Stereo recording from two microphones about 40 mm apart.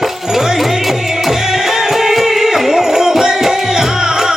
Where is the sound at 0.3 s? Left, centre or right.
Centre.